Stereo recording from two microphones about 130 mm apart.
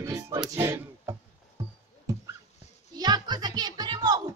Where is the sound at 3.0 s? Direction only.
30° right (ahead or behind).